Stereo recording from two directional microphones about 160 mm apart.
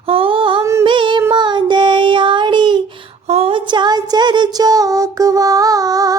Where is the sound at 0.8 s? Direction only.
30° right (ahead or behind).